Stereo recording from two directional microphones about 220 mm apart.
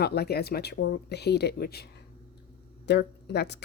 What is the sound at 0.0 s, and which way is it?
Speech, 45° left (ahead or behind).